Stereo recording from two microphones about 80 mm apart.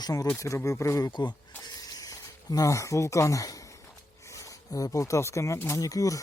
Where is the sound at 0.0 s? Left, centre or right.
Left.